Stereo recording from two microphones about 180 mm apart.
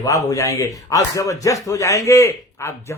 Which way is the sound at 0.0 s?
20° left (ahead or behind).